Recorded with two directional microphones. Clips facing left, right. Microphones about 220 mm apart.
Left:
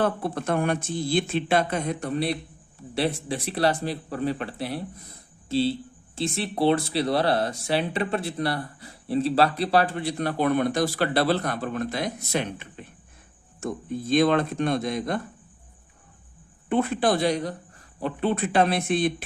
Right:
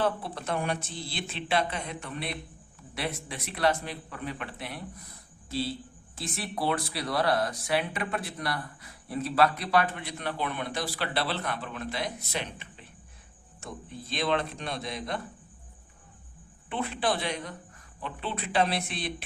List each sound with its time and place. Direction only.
0.0 s speech: 50° left (ahead or behind)
16.6 s speech: 45° left (ahead or behind)
18.0 s speech: 50° left (ahead or behind)